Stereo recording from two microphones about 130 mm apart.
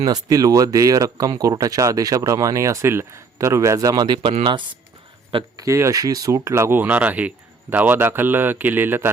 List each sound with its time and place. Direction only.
0.0 s speech: 30° right (ahead or behind)
5.5 s speech: 25° right (ahead or behind)